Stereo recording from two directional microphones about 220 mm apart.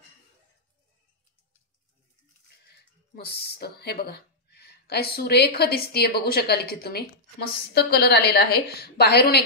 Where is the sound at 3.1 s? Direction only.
45° left (ahead or behind).